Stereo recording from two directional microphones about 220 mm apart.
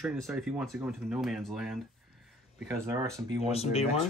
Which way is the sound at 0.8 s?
Centre (ahead or behind).